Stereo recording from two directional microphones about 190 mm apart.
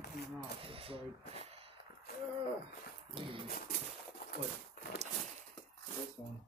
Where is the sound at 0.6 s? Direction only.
30° right (ahead or behind).